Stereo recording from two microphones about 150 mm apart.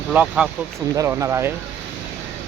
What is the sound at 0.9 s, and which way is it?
Speech, 20° right (ahead or behind).